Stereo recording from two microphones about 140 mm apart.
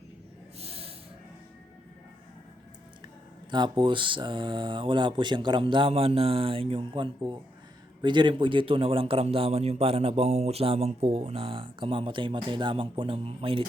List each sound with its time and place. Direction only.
0.6 s snort: 45° right (ahead or behind)
3.5 s a man's voice: 35° right (ahead or behind)